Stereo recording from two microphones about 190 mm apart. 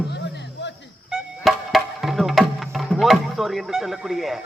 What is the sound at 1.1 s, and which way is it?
Music, centre (ahead or behind).